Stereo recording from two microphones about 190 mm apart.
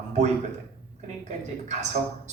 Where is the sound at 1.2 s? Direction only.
40° right (ahead or behind).